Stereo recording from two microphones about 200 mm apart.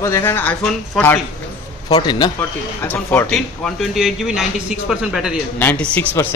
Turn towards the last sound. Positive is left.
turn(degrees=10)  # may be behind; listen again after turning